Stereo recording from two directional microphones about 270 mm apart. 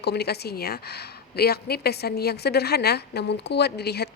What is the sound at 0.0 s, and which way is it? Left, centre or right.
A woman's voice, left.